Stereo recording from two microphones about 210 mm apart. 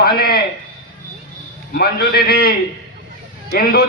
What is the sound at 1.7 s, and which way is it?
A man's voice, 50° left (ahead or behind).